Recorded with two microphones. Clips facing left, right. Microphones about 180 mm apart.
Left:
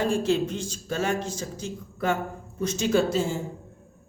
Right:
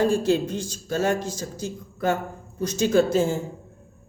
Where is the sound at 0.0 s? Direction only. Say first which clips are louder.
Right 3 dB; 35° right (ahead or behind).